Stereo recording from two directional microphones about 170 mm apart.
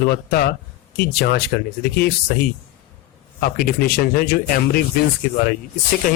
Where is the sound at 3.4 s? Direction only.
60° left (ahead or behind).